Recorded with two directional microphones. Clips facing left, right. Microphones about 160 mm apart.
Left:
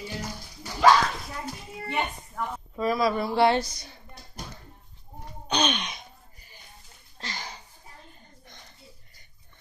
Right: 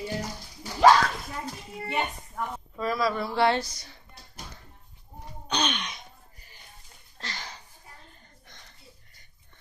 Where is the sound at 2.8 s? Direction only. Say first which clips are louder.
Left 3 dB; 15° left (ahead or behind).